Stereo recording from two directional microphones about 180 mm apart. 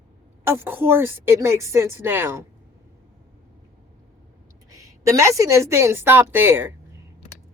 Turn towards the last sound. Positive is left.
turn(degrees=-10)  # may be behind; listen again after turning